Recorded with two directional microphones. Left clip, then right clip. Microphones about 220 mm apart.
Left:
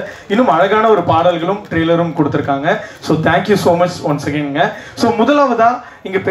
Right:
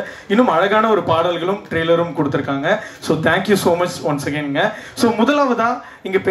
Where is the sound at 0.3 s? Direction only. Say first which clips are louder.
Left 3 dB; 45° right (ahead or behind).